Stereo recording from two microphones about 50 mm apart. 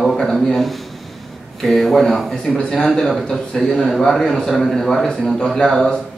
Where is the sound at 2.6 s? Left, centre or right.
Centre.